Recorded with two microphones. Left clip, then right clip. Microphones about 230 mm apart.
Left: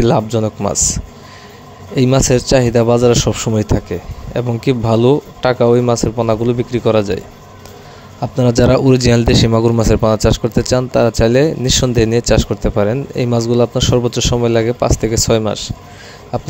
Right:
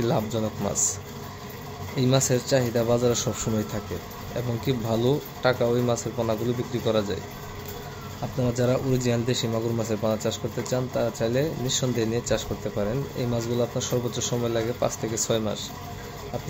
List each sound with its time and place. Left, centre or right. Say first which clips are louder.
0.0 s speech: left 12 dB; left
8.2 s speech: left 13 dB; left